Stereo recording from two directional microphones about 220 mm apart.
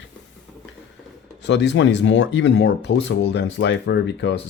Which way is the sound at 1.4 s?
55° left (ahead or behind).